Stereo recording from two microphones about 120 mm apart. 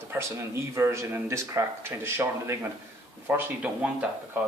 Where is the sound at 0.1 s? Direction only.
20° right (ahead or behind).